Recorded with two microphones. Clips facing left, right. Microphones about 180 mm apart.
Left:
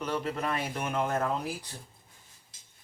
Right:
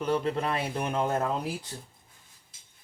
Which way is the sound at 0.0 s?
30° right (ahead or behind).